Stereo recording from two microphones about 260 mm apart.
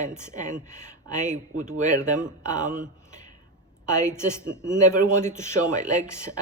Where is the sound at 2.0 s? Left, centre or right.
Centre.